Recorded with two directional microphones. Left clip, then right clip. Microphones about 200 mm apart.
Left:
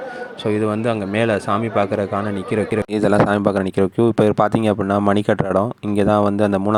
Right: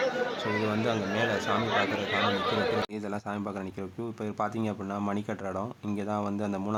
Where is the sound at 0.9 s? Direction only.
35° left (ahead or behind).